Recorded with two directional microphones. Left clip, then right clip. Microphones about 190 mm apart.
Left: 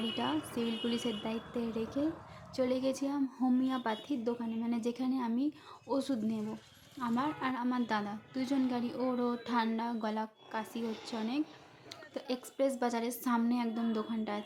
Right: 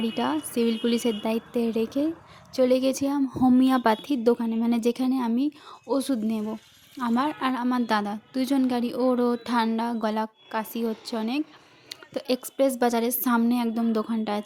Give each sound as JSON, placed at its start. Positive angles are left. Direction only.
{"t": 0.1, "sound": "a woman's voice", "side_deg": -40}